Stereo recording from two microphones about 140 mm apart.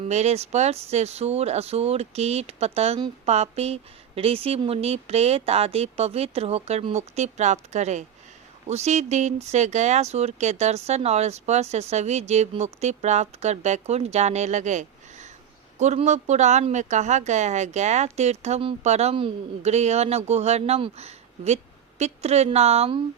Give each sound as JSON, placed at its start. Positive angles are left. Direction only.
{"t": 0.0, "sound": "a woman's voice", "side_deg": -50}